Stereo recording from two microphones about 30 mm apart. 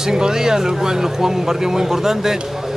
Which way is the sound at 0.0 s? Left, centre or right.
Centre.